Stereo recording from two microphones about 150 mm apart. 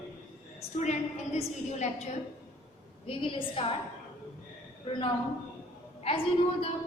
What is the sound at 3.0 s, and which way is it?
Speech, 35° left (ahead or behind).